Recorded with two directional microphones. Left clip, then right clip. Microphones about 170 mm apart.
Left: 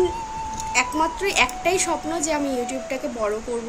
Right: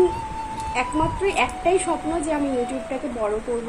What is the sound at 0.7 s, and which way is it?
Speech, 20° left (ahead or behind).